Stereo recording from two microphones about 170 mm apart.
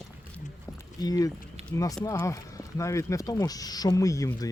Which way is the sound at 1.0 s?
20° left (ahead or behind).